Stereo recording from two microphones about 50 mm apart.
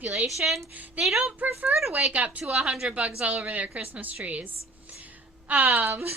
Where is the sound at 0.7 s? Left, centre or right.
Right.